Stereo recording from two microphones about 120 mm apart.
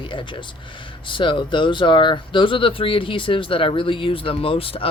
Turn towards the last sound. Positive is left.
turn(degrees=50)  # may be behind; listen again after turning